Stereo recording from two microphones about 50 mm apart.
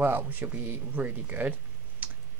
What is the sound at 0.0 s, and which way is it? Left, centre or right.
Speech, right.